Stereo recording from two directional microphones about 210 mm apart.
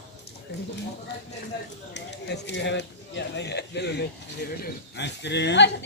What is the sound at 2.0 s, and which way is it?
Speech, 55° left (ahead or behind).